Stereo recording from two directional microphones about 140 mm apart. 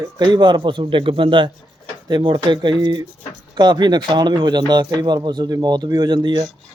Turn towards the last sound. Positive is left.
turn(degrees=-30)  # may be behind; listen again after turning